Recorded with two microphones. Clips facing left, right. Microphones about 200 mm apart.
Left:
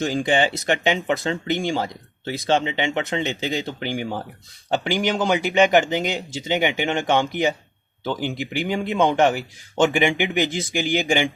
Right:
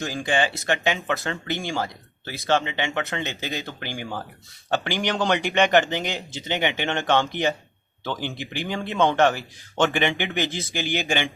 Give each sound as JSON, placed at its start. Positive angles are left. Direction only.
{"t": 0.0, "sound": "speech", "side_deg": 20}